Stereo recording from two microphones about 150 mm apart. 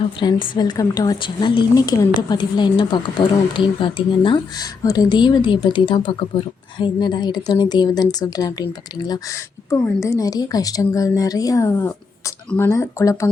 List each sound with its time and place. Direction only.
0.2 s a woman's voice: 30° left (ahead or behind)